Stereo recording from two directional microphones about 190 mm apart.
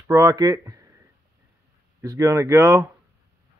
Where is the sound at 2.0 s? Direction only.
15° right (ahead or behind).